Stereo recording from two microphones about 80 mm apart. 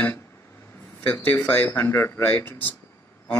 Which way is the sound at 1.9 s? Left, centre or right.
Left.